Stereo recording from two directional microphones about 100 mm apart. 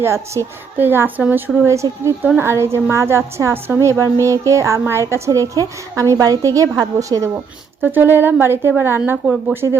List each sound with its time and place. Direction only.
0.0 s a woman's voice: 25° right (ahead or behind)
1.6 s a woman's voice: 30° right (ahead or behind)
7.8 s a woman's voice: 20° right (ahead or behind)